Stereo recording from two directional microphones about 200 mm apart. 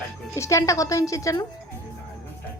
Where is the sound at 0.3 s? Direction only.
15° left (ahead or behind).